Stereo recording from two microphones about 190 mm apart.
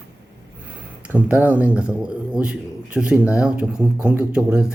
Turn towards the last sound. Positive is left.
turn(degrees=-5)  # may be behind; listen again after turning